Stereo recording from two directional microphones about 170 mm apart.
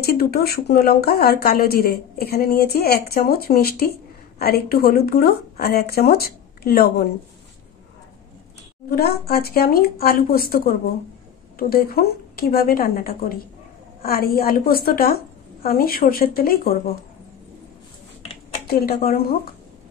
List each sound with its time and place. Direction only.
0.0 s a woman's voice: 65° left (ahead or behind)
8.9 s a woman's voice: 65° left (ahead or behind)
18.7 s a woman's voice: 65° left (ahead or behind)